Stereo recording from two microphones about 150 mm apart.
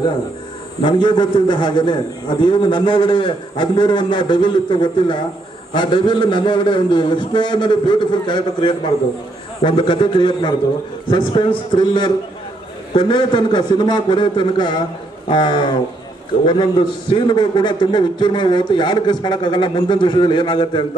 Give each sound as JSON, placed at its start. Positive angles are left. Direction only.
{"t": 0.8, "sound": "a man's voice", "side_deg": 30}